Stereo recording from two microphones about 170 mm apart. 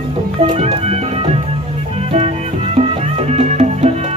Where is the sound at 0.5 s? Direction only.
35° right (ahead or behind).